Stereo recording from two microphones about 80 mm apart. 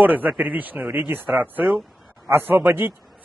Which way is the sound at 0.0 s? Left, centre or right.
Right.